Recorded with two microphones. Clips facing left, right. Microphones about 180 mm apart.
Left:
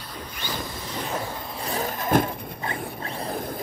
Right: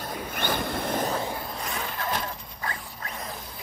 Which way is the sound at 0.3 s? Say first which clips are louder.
Right 5 dB; 55° right (ahead or behind).